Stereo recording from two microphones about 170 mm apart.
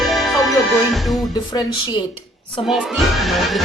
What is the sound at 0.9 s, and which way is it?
Speech, centre (ahead or behind).